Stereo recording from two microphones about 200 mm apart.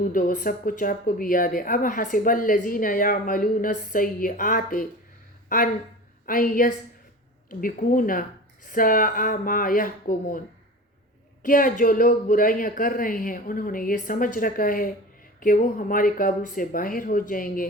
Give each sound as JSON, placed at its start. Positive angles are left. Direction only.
{"t": 0.0, "sound": "speech", "side_deg": 40}
{"t": 6.2, "sound": "speech", "side_deg": 45}
{"t": 11.4, "sound": "speech", "side_deg": 45}